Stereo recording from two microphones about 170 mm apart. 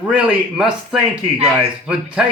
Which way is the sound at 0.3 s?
5° right (ahead or behind).